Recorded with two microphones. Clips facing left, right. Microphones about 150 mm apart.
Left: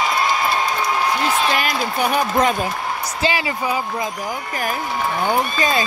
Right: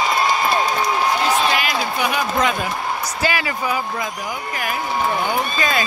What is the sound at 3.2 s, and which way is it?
Speech, 25° left (ahead or behind).